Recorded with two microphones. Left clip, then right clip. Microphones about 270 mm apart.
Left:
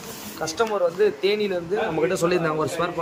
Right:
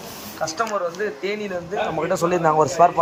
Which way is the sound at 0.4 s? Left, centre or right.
Centre.